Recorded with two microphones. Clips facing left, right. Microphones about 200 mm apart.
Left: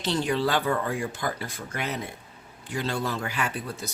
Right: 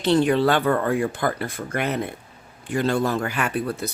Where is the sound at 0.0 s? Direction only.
60° right (ahead or behind).